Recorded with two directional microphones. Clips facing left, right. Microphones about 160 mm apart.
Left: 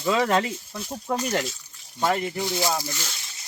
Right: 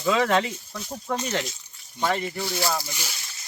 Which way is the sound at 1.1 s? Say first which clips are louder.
Left 2 dB; 15° left (ahead or behind).